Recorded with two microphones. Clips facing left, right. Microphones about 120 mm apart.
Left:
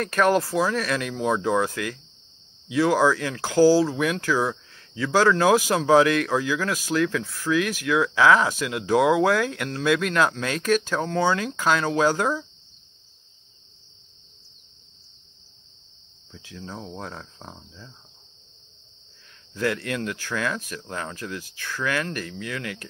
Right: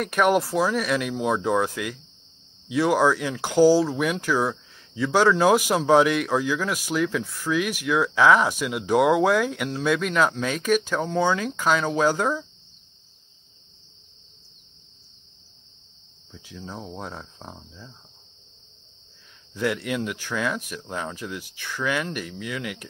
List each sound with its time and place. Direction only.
0.0 s speech: 10° right (ahead or behind)
3.3 s speech: 20° right (ahead or behind)
3.6 s speech: 5° left (ahead or behind)
3.9 s speech: 10° right (ahead or behind)
16.3 s speech: 5° right (ahead or behind)
19.5 s speech: 5° right (ahead or behind)